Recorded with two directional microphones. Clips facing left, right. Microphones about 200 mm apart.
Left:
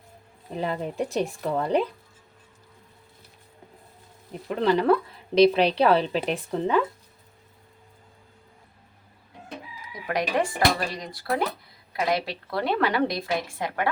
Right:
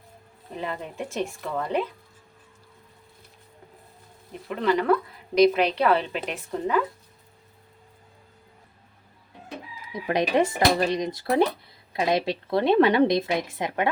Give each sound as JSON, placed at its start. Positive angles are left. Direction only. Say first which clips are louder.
{"t": 0.6, "sound": "a woman's voice", "louder": "left 5 dB", "side_deg": 35}
{"t": 4.6, "sound": "a woman's voice", "louder": "left 1 dB", "side_deg": 30}
{"t": 9.9, "sound": "a woman's voice", "louder": "right 3 dB", "side_deg": -20}